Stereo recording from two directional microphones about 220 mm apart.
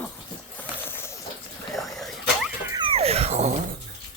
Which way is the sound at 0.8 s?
10° left (ahead or behind).